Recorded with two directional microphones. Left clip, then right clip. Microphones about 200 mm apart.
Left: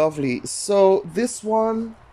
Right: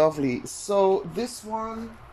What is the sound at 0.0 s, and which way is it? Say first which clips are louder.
Speech: left 1 dB; 15° left (ahead or behind).